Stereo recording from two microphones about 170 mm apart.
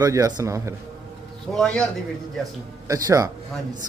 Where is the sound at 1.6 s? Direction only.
5° left (ahead or behind).